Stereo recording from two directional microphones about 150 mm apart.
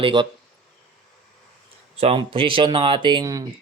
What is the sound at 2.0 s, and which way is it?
Speech, 40° right (ahead or behind).